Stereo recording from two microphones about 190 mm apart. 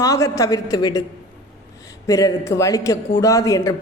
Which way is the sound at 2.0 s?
15° left (ahead or behind).